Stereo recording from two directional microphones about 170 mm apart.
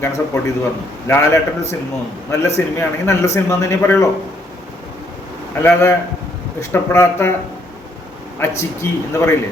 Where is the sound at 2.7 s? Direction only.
15° left (ahead or behind).